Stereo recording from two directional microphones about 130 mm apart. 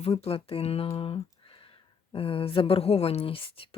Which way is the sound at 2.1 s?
45° left (ahead or behind).